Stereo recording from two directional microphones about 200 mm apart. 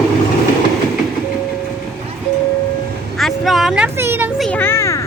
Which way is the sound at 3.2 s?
Centre (ahead or behind).